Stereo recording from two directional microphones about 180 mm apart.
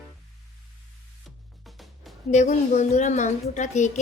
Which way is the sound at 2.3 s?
40° left (ahead or behind).